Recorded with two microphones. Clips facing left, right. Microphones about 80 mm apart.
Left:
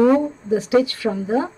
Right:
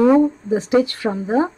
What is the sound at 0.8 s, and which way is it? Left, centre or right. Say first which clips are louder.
Speech: even; right.